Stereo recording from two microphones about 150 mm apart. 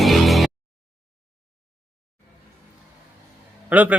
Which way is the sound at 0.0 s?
Centre (ahead or behind).